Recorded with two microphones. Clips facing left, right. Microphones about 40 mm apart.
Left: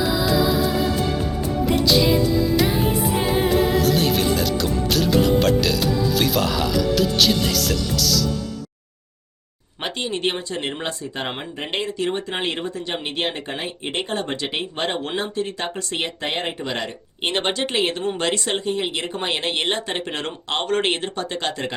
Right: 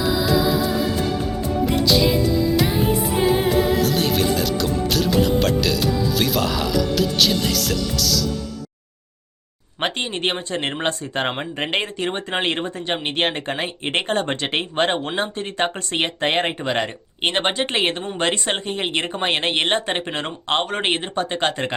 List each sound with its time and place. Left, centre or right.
0.0 s music: centre
9.8 s speech: right
13.2 s speech: right
16.6 s speech: right
20.0 s speech: right
21.2 s speech: right